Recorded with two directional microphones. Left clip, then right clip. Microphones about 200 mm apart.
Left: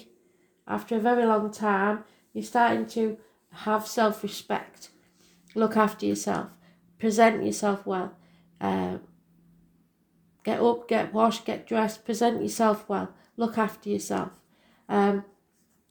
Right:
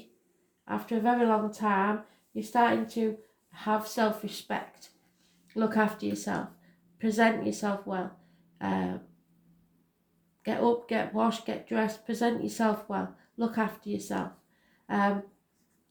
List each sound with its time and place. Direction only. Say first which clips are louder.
0.6 s speech: left 3 dB; 35° left (ahead or behind)
8.5 s a sound: left 4 dB; 40° left (ahead or behind)
10.4 s speech: left 3 dB; 35° left (ahead or behind)